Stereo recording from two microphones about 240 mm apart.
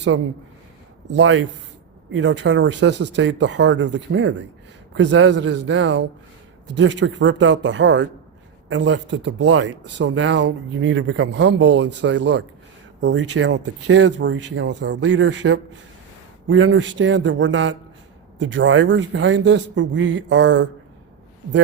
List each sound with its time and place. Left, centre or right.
1.1 s speech: right